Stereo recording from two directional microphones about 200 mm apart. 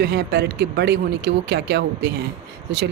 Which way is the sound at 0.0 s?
55° right (ahead or behind).